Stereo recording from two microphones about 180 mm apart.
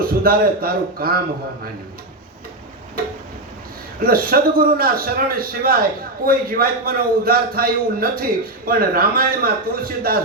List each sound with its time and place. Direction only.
0.0 s a man's voice: 55° right (ahead or behind)
3.0 s tick-tock: 55° right (ahead or behind)
4.0 s a man's voice: 55° right (ahead or behind)